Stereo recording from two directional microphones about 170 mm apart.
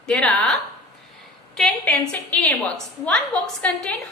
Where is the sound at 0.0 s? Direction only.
5° left (ahead or behind).